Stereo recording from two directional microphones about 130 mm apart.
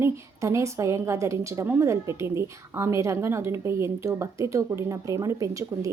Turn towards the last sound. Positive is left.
turn(degrees=-25)  # may be behind; listen again after turning